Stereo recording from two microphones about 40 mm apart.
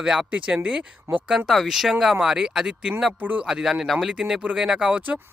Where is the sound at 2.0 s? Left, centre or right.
Centre.